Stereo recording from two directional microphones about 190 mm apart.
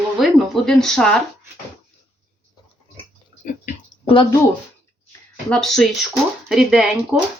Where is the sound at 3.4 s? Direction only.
45° left (ahead or behind).